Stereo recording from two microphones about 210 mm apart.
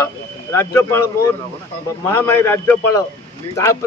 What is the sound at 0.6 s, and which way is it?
Speech, 15° left (ahead or behind).